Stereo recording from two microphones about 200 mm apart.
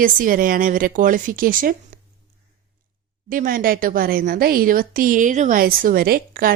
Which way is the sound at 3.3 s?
45° right (ahead or behind).